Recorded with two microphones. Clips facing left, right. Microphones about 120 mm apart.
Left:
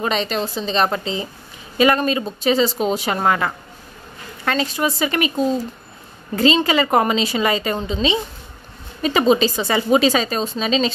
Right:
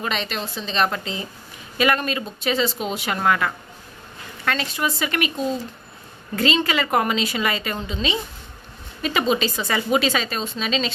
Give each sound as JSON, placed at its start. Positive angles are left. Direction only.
{"t": 0.0, "sound": "a woman's voice", "side_deg": 35}
{"t": 6.3, "sound": "a woman's voice", "side_deg": 30}